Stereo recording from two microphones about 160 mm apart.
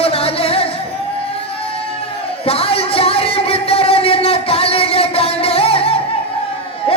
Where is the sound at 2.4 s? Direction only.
35° left (ahead or behind).